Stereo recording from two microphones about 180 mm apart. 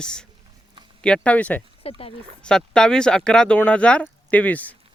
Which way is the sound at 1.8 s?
30° left (ahead or behind).